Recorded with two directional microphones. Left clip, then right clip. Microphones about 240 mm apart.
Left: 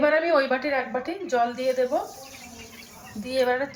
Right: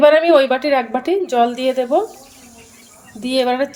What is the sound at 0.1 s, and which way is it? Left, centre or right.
A woman's voice, right.